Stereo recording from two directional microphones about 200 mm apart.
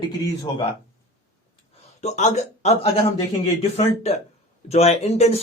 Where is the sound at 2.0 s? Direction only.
35° left (ahead or behind).